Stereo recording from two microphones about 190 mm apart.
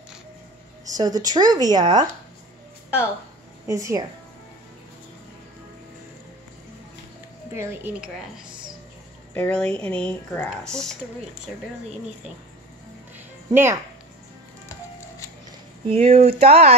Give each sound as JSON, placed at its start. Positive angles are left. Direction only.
{"t": 0.9, "sound": "speech", "side_deg": -20}
{"t": 3.6, "sound": "speech", "side_deg": -15}
{"t": 7.5, "sound": "speech", "side_deg": -10}
{"t": 9.3, "sound": "speech", "side_deg": 5}
{"t": 13.5, "sound": "speech", "side_deg": -15}
{"t": 15.9, "sound": "speech", "side_deg": -35}